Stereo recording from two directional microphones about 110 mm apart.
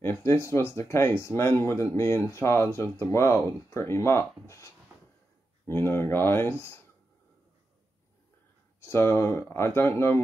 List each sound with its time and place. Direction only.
0.0 s speech: 25° left (ahead or behind)
8.8 s speech: 25° left (ahead or behind)